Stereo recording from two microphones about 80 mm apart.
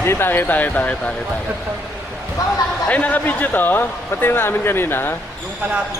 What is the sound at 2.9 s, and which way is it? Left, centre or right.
Speech, centre.